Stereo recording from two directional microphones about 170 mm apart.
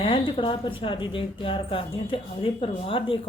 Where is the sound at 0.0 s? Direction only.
30° left (ahead or behind).